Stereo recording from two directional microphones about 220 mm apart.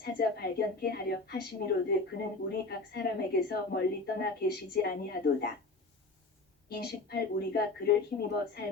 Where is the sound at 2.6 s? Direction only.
45° left (ahead or behind).